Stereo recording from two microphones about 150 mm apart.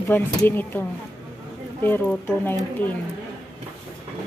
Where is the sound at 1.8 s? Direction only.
15° left (ahead or behind).